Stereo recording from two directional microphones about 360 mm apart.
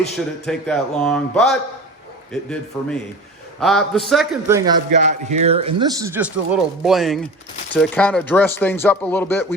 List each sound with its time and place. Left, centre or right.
0.4 s speech: centre
4.9 s speech: centre